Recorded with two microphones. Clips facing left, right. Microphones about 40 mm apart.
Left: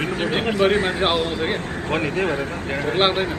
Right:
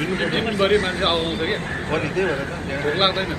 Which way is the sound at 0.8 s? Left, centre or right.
Left.